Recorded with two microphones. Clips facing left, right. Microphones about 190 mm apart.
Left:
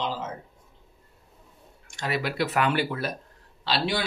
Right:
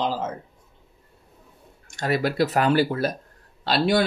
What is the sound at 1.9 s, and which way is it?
Speech, 45° right (ahead or behind).